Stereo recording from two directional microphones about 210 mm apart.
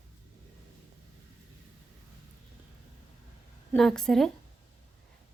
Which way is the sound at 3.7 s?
Centre (ahead or behind).